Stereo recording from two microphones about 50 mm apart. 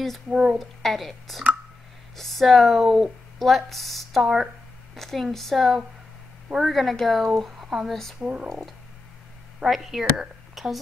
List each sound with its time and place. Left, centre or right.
0.3 s speech: centre
0.6 s speech: centre
7.5 s a sound: centre
7.9 s speech: centre
8.2 s speech: centre
8.5 s speech: centre
10.5 s whispering: centre